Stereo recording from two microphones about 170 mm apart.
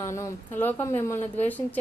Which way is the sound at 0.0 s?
15° left (ahead or behind).